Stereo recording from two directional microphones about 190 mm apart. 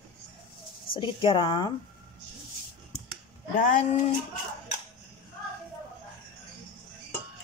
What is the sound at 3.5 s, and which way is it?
Speech, 45° left (ahead or behind).